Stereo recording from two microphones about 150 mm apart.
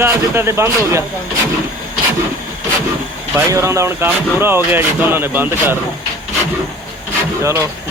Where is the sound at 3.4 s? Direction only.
20° right (ahead or behind).